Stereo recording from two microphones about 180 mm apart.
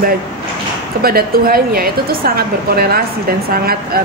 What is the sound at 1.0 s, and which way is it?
Speech, 55° right (ahead or behind).